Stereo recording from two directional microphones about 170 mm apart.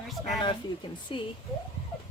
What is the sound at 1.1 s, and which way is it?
Speech, 30° left (ahead or behind).